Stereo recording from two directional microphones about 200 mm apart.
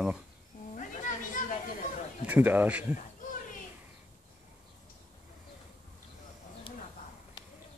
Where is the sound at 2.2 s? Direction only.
10° right (ahead or behind).